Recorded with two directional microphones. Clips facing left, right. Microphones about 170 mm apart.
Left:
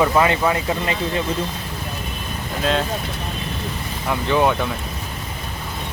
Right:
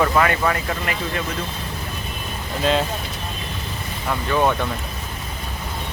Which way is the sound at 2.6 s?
Centre (ahead or behind).